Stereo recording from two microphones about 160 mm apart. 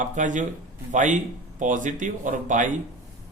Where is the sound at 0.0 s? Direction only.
50° right (ahead or behind).